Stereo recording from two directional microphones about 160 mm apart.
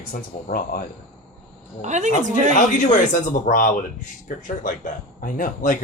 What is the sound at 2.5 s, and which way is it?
Speech, 55° left (ahead or behind).